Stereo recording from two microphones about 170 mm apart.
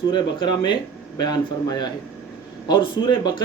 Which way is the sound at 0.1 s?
25° left (ahead or behind).